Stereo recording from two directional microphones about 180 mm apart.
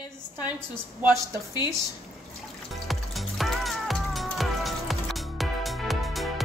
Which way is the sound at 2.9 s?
Centre (ahead or behind).